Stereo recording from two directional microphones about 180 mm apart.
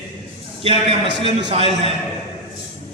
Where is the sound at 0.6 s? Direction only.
30° right (ahead or behind).